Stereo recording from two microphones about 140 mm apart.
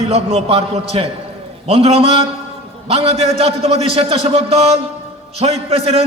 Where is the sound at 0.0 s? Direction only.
45° right (ahead or behind).